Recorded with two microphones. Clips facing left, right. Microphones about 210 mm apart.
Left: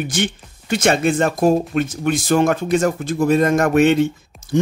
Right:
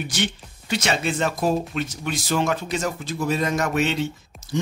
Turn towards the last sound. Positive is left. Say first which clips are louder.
# left 6 dB
turn(degrees=50)  # may be behind; listen again after turning